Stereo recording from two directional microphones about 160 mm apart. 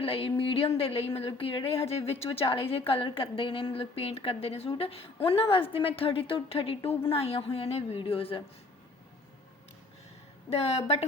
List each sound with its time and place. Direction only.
0.0 s a woman's voice: 35° left (ahead or behind)
10.5 s a woman's voice: 40° left (ahead or behind)